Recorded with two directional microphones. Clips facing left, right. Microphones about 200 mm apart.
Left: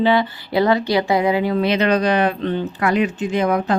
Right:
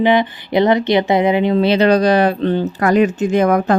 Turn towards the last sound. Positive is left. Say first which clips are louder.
# right 5 dB
turn(degrees=-50)  # may be behind; listen again after turning